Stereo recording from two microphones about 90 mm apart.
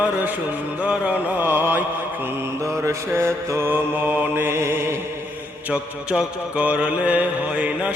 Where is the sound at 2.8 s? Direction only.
30° right (ahead or behind).